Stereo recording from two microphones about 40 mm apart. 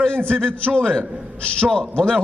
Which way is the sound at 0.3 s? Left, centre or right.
Left.